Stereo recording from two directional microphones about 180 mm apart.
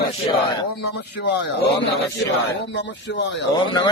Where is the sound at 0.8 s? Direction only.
70° left (ahead or behind).